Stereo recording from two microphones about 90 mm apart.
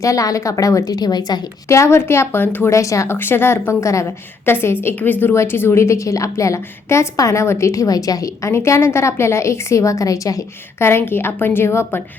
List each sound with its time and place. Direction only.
0.0 s a woman's voice: 40° left (ahead or behind)
1.6 s speech: 30° left (ahead or behind)
2.6 s a woman's voice: 35° left (ahead or behind)